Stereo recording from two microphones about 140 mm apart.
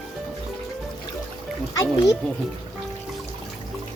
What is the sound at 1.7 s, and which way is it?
Speech, 25° left (ahead or behind).